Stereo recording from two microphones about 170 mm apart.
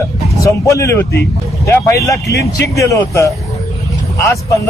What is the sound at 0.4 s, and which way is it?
A man's voice, 15° left (ahead or behind).